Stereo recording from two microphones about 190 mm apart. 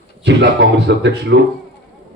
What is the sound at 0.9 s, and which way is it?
Speech, 70° right (ahead or behind).